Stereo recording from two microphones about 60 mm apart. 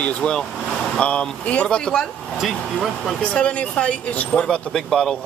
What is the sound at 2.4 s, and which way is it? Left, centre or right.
Speech, centre.